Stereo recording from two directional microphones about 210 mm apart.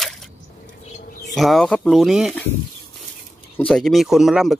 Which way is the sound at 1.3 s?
Centre (ahead or behind).